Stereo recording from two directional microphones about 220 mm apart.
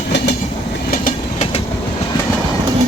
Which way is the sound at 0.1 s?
50° left (ahead or behind).